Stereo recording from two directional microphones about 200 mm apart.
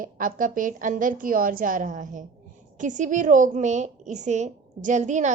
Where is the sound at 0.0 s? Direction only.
40° right (ahead or behind).